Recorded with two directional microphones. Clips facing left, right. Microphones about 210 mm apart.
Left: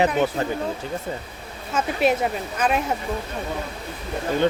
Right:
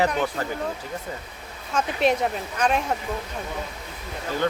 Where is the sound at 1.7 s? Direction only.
5° left (ahead or behind).